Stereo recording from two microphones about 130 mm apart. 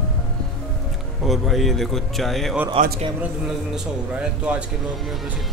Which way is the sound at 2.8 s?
55° right (ahead or behind).